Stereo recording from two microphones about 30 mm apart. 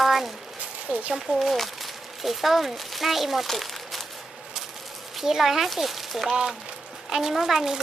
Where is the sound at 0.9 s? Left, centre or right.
Right.